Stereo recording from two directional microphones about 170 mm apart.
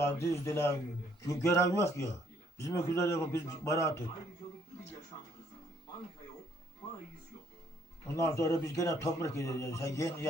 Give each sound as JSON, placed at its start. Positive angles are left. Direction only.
{"t": 0.2, "sound": "a man's voice", "side_deg": 15}
{"t": 8.0, "sound": "a man's voice", "side_deg": 15}